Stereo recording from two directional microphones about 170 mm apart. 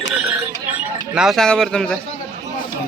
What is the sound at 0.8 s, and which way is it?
Speech, 5° right (ahead or behind).